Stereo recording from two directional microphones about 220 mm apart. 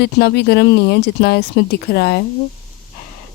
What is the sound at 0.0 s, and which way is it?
Speech, 50° left (ahead or behind).